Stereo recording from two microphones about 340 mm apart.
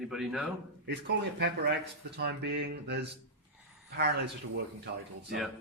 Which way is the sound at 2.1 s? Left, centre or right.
Right.